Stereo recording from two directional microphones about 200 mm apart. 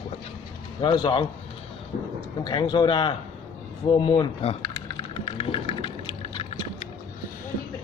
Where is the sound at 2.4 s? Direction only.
25° left (ahead or behind).